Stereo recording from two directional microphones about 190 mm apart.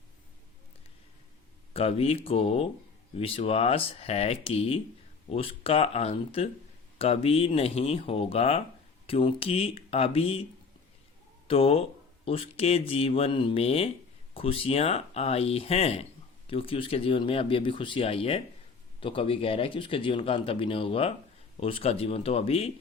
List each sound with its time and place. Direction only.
1.7 s speech: 30° left (ahead or behind)
11.4 s speech: 30° left (ahead or behind)